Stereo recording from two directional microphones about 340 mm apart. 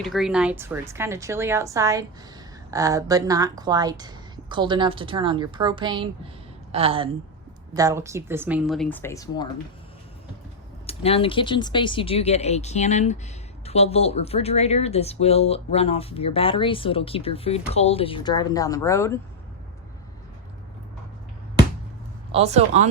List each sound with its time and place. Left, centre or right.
0.0 s a woman's voice: centre
10.8 s speech: centre
22.3 s speech: centre